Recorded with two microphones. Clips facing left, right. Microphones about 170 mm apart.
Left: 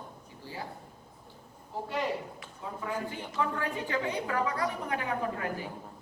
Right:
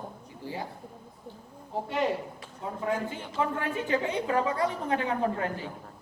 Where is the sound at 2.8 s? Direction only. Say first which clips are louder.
Right 5 dB; 20° right (ahead or behind).